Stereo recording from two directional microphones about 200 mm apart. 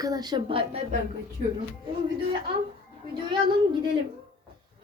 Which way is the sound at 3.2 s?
25° right (ahead or behind).